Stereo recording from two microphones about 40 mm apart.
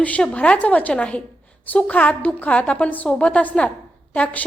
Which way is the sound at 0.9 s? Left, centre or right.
Left.